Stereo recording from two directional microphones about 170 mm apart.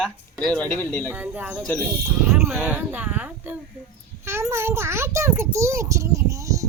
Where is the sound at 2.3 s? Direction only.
15° right (ahead or behind).